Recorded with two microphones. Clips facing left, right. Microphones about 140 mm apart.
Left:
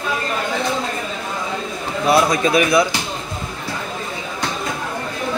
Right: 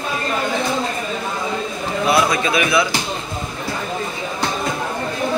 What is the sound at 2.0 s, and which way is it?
Speech, 40° left (ahead or behind).